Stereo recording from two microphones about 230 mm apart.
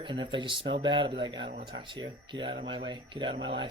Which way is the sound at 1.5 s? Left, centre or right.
Right.